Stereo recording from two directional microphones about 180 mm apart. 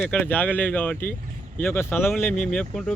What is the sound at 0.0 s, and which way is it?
Speech, 10° left (ahead or behind).